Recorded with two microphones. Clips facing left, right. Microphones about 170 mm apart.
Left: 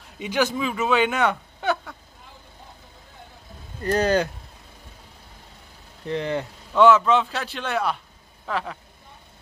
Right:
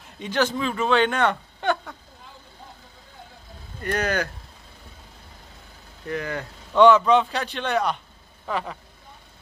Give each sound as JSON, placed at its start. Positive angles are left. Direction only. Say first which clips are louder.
{"t": 0.2, "sound": "speech", "louder": "even", "side_deg": 10}
{"t": 3.8, "sound": "speech", "louder": "left 5 dB", "side_deg": 30}
{"t": 6.0, "sound": "speech", "louder": "left 3 dB", "side_deg": 25}
{"t": 6.7, "sound": "a man's voice", "louder": "right 1 dB", "side_deg": 0}